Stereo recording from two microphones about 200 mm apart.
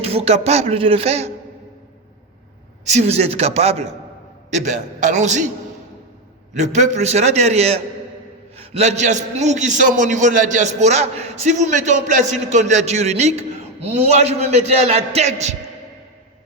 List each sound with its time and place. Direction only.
0.0 s a man's voice: 30° right (ahead or behind)
2.9 s a man's voice: 30° right (ahead or behind)
6.6 s a man's voice: 35° right (ahead or behind)